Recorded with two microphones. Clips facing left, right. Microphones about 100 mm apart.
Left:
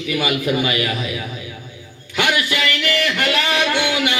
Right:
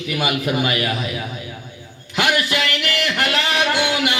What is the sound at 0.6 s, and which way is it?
Music, 40° right (ahead or behind).